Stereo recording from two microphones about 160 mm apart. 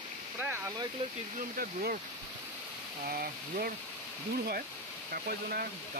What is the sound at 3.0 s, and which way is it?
Speech, 65° right (ahead or behind).